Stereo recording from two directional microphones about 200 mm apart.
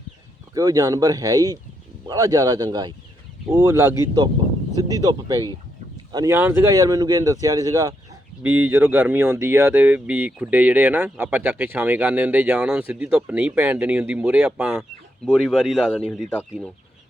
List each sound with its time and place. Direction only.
0.5 s speech: 20° right (ahead or behind); by 16.3 s centre (ahead or behind)